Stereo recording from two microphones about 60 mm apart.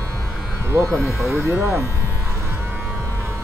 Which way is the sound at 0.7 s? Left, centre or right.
Right.